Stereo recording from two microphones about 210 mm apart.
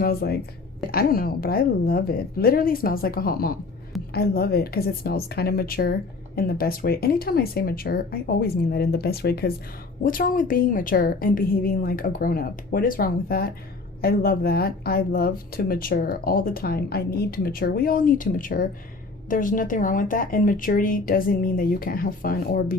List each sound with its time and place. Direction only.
0.0 s a woman's voice: 45° left (ahead or behind)